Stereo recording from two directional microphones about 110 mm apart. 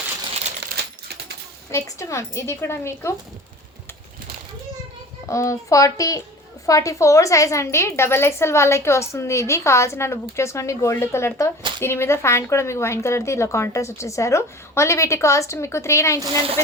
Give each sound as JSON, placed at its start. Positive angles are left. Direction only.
{"t": 1.7, "sound": "a woman's voice", "side_deg": 30}
{"t": 5.3, "sound": "a woman's voice", "side_deg": 30}